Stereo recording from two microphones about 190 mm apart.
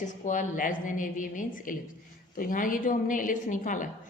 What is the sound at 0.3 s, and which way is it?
A woman's voice, 45° left (ahead or behind).